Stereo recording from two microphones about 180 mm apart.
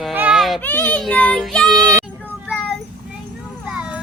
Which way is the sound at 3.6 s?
5° right (ahead or behind).